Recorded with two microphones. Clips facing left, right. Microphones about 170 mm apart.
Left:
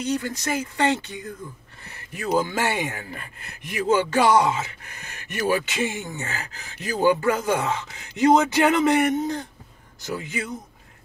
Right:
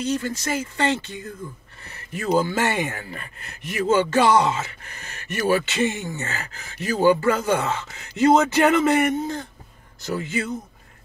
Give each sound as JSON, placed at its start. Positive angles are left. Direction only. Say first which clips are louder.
{"t": 0.0, "sound": "speech", "louder": "right 1 dB", "side_deg": 15}